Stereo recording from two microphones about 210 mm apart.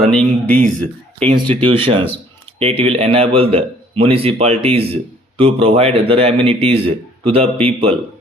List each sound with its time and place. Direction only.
0.0 s speech: 5° left (ahead or behind)
1.2 s speech: 25° right (ahead or behind)